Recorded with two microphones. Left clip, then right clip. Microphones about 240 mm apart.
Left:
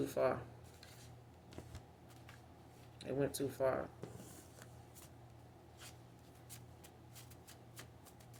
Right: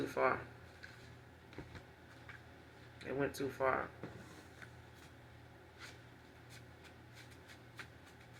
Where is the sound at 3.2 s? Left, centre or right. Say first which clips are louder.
Even; left.